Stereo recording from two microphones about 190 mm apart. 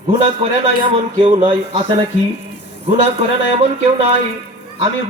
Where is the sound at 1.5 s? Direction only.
30° right (ahead or behind).